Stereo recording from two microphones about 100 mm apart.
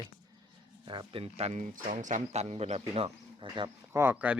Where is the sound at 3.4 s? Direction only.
55° right (ahead or behind).